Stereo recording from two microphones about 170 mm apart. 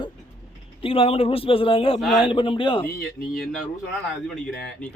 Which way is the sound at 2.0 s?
Centre (ahead or behind).